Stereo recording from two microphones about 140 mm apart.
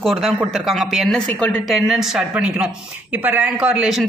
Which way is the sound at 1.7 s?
Centre (ahead or behind).